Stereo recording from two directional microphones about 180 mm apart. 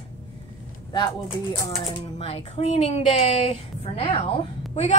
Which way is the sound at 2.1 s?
35° left (ahead or behind).